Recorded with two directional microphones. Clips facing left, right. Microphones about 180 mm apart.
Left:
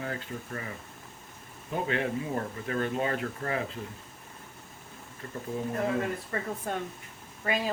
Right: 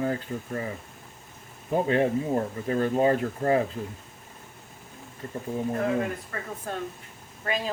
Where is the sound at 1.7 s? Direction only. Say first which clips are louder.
Right 7 dB; 40° right (ahead or behind).